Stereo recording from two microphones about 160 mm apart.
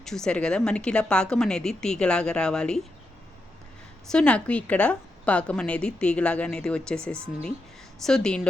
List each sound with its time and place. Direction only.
0.0 s a woman's voice: 5° left (ahead or behind)
4.0 s a woman's voice: 5° left (ahead or behind)